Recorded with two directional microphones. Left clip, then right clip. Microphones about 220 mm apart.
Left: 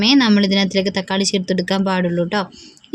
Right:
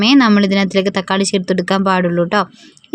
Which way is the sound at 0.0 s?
20° right (ahead or behind).